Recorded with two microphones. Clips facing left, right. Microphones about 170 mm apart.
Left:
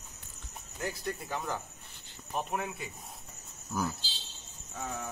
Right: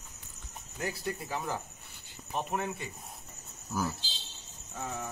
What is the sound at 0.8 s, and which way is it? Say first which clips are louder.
Mantra: even; 5° right (ahead or behind).